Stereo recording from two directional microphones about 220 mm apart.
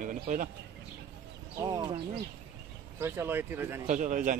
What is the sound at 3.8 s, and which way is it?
Speech, 35° right (ahead or behind).